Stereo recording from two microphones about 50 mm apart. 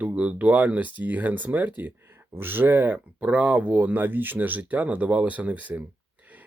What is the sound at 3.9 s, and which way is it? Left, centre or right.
Speech, right.